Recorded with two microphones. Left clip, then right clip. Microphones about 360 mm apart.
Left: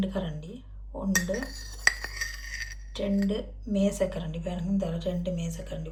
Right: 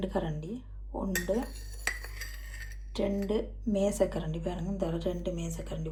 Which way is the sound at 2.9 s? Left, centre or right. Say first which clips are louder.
Even; centre.